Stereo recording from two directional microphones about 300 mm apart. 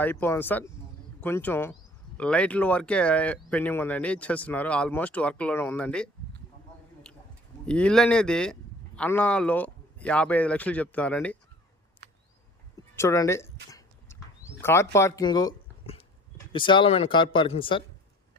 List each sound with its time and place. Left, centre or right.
0.0 s speech: centre
7.6 s speech: centre
13.0 s speech: centre
13.7 s a sound: centre
14.6 s speech: centre